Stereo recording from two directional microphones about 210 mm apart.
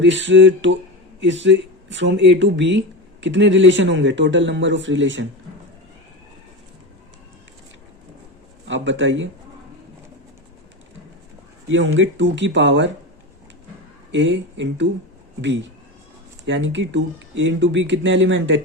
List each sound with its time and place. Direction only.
0.0 s speech: 60° right (ahead or behind)
8.6 s speech: 60° right (ahead or behind)
11.7 s speech: 65° right (ahead or behind)
14.1 s speech: 60° right (ahead or behind)